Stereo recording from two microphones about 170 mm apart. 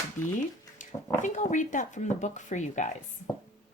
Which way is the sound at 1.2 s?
45° left (ahead or behind).